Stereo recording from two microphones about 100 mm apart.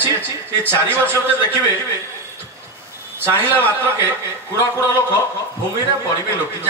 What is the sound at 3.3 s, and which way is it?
Speech, 20° right (ahead or behind).